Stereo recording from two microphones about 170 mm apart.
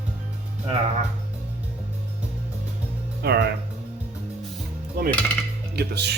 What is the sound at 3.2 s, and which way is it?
Speech, 75° right (ahead or behind).